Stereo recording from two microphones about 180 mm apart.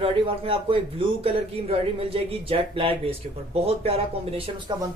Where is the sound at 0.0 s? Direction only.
30° right (ahead or behind).